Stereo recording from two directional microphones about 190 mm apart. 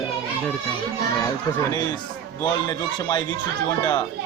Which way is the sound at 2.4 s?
20° left (ahead or behind).